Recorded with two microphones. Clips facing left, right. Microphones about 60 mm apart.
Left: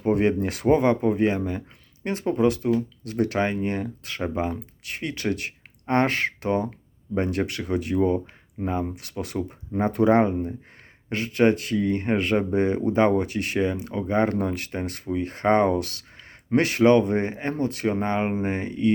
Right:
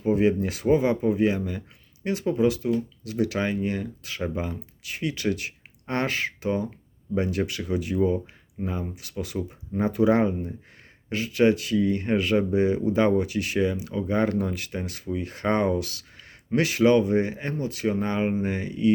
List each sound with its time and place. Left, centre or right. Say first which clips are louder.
0.0 s speech: even; left
18.0 s speech: left 1 dB; left